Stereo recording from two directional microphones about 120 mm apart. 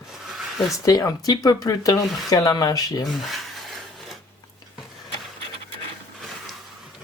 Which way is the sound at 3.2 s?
Centre (ahead or behind).